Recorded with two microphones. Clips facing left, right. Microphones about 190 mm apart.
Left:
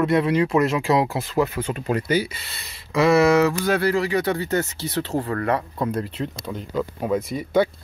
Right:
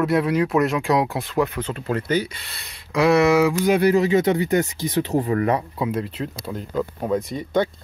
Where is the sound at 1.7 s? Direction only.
15° left (ahead or behind); by 5.6 s 15° right (ahead or behind).